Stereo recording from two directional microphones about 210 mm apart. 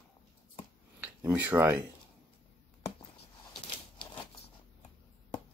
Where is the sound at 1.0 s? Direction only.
10° right (ahead or behind).